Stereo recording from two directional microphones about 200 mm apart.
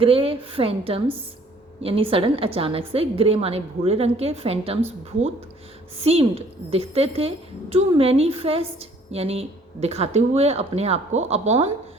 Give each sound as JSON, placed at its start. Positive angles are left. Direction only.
{"t": 0.0, "sound": "a woman's voice", "side_deg": -25}
{"t": 6.0, "sound": "a woman's voice", "side_deg": -30}